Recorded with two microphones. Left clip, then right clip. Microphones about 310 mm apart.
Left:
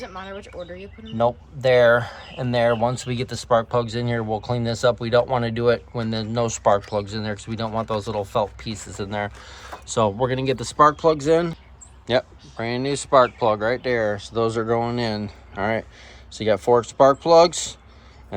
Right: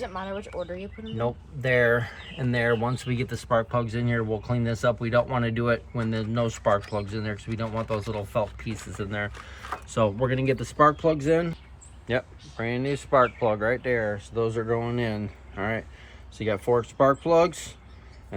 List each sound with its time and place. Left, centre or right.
0.0 s speech: right
1.2 s speech: centre